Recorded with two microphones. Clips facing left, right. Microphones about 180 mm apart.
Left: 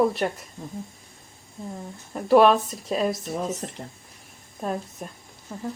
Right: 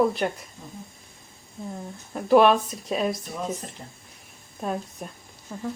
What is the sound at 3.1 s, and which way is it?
Speech, 25° left (ahead or behind).